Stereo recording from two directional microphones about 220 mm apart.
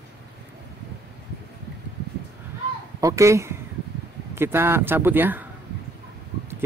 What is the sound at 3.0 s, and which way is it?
Speech, 15° right (ahead or behind).